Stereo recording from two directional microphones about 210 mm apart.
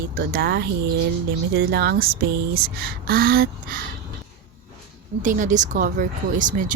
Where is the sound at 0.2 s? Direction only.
50° right (ahead or behind).